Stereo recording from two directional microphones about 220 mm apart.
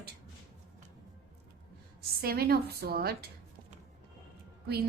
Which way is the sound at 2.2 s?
45° right (ahead or behind).